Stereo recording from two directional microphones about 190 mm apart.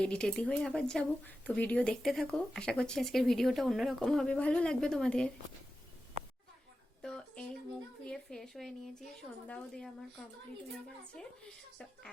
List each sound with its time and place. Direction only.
0.0 s speech: 5° left (ahead or behind)
7.0 s a sound: 5° left (ahead or behind)
8.0 s speech: 5° left (ahead or behind)